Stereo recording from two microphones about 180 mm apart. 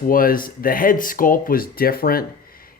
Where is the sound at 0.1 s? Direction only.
50° left (ahead or behind).